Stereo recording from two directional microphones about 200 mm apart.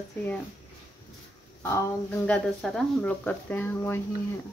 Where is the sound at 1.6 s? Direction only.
10° left (ahead or behind).